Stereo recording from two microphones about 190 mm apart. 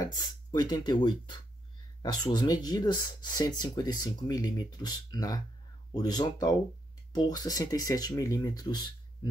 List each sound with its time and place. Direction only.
0.0 s speech: 20° left (ahead or behind)